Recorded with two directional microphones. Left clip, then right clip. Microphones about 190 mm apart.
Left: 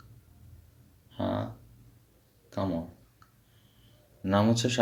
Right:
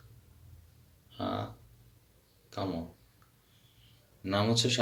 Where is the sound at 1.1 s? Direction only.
55° left (ahead or behind).